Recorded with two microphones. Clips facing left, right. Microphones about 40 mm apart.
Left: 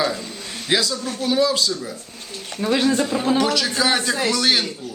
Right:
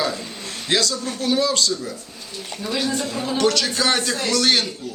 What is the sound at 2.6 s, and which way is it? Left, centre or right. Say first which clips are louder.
Speech: left 5 dB; left.